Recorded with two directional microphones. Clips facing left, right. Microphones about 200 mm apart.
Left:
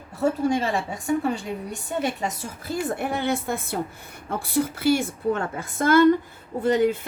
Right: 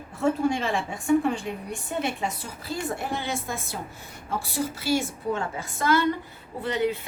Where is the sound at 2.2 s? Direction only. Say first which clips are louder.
Left 2 dB; 55° left (ahead or behind).